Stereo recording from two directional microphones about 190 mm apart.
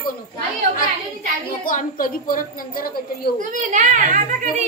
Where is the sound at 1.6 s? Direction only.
45° left (ahead or behind).